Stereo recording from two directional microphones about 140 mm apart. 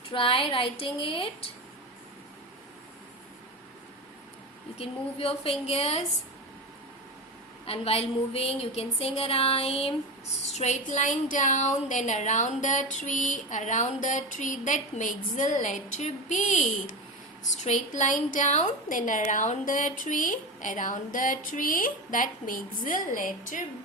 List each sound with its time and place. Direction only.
0.1 s speech: 40° left (ahead or behind)
4.8 s a woman's voice: 45° left (ahead or behind)
7.6 s a woman's voice: 45° left (ahead or behind); by 23.6 s 70° left (ahead or behind)